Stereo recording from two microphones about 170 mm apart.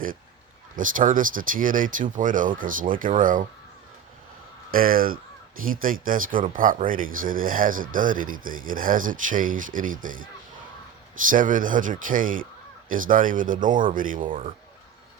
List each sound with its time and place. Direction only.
0.8 s speech: 50° right (ahead or behind)
4.7 s speech: 55° right (ahead or behind)
11.3 s speech: 50° right (ahead or behind)